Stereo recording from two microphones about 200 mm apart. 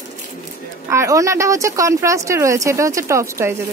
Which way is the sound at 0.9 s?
15° right (ahead or behind).